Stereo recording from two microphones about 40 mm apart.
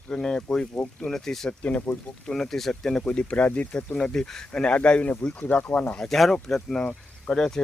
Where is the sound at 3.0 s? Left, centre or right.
Left.